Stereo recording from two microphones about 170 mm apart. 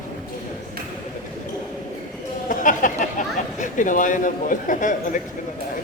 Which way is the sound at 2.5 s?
50° left (ahead or behind).